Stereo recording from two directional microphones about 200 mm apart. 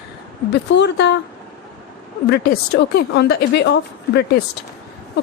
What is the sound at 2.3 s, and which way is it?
Speech, 55° left (ahead or behind).